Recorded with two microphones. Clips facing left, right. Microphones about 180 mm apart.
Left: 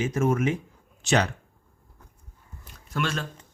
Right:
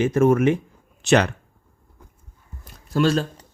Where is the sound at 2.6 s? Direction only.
35° right (ahead or behind).